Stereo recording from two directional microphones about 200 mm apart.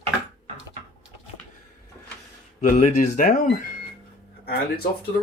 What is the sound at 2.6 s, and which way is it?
Speech, 40° left (ahead or behind).